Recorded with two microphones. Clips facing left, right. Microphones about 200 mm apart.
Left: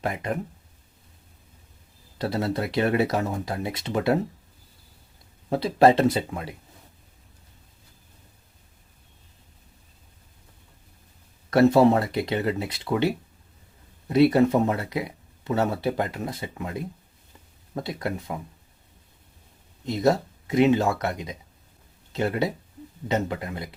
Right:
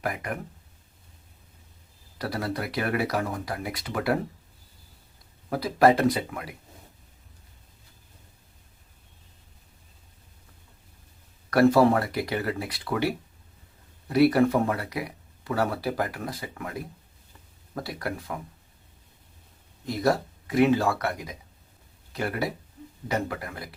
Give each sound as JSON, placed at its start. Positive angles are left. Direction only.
{"t": 0.0, "sound": "speech", "side_deg": 25}
{"t": 2.1, "sound": "speech", "side_deg": 25}
{"t": 5.5, "sound": "speech", "side_deg": 25}
{"t": 11.5, "sound": "speech", "side_deg": 25}
{"t": 19.8, "sound": "speech", "side_deg": 20}